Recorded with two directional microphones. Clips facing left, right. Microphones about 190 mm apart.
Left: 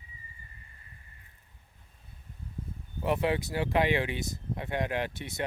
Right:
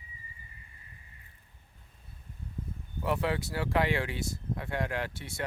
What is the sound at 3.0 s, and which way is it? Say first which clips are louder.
Speech: left 2 dB; 20° left (ahead or behind).